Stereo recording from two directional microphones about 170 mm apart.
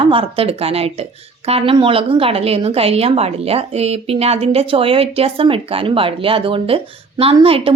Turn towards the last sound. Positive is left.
turn(degrees=-35)  # may be behind; listen again after turning